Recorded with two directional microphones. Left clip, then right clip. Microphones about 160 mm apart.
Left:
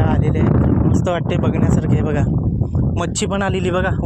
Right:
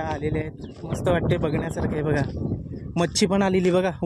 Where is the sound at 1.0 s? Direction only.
25° right (ahead or behind).